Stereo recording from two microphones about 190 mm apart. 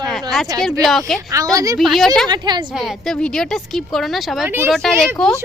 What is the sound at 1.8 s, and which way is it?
Speech, centre (ahead or behind).